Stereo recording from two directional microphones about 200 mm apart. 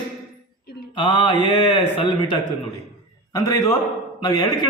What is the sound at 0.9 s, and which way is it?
A man's voice, 25° left (ahead or behind).